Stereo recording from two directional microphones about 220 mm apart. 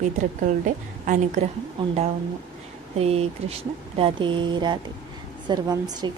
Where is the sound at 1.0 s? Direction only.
35° right (ahead or behind).